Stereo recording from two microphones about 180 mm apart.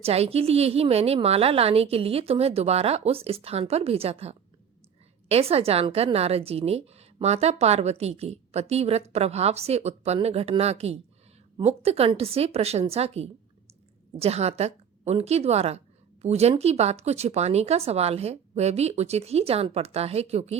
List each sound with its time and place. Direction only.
0.0 s a woman's voice: 35° right (ahead or behind)